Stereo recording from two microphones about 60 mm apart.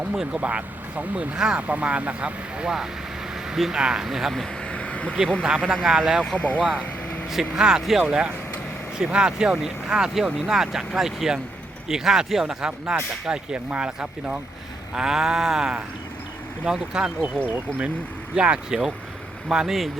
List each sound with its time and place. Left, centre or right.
0.1 s speech: centre
4.6 s a sound: centre
5.6 s speech: centre
6.3 s speech: left
7.3 s speech: centre